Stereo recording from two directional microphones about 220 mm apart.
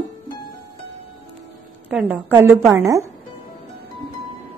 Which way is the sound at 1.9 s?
5° right (ahead or behind).